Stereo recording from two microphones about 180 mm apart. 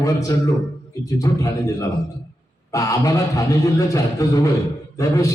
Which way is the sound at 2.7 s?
20° left (ahead or behind).